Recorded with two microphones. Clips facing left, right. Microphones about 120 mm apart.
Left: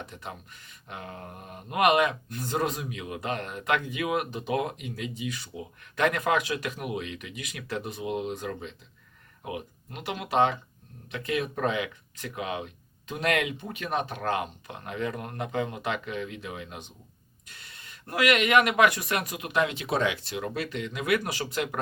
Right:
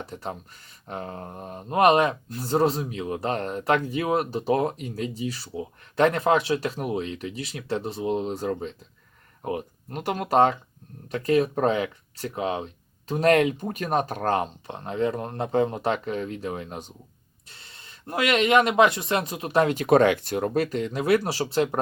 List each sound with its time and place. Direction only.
0.0 s speech: 35° right (ahead or behind)
17.5 s speech: 30° right (ahead or behind)